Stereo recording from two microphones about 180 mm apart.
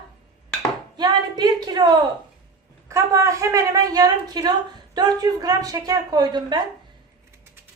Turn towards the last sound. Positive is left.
turn(degrees=-25)  # may be behind; listen again after turning